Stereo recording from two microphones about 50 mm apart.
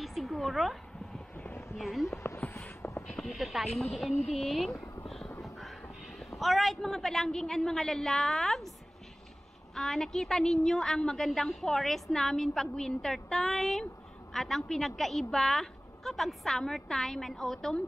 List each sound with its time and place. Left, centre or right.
0.0 s cat: centre
1.3 s a sound: left
1.8 s speech: centre
2.4 s a sound: left
3.2 s a man's voice: centre
9.8 s a woman's voice: centre